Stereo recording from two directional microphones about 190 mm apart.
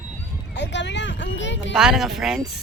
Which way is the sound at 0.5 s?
65° left (ahead or behind).